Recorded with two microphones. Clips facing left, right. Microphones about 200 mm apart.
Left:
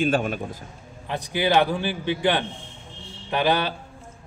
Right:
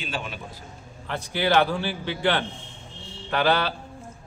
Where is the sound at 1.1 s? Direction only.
15° left (ahead or behind).